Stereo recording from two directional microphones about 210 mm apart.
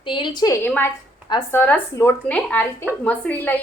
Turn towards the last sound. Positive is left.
turn(degrees=10)  # may be behind; listen again after turning